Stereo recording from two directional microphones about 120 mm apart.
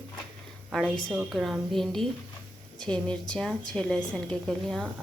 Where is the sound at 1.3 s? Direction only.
Centre (ahead or behind).